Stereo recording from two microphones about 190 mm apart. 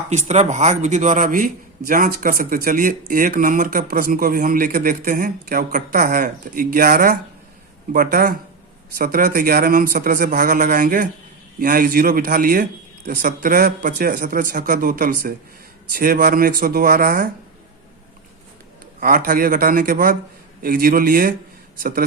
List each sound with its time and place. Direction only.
0.1 s speech: 35° right (ahead or behind)
18.9 s speech: 50° right (ahead or behind)